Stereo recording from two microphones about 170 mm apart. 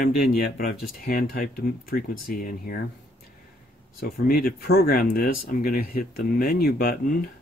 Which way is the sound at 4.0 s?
60° left (ahead or behind).